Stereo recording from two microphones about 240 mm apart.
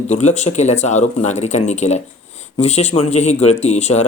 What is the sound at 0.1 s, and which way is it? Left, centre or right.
Speech, left.